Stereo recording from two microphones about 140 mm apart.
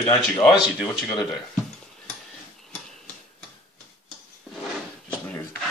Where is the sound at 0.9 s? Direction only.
25° left (ahead or behind).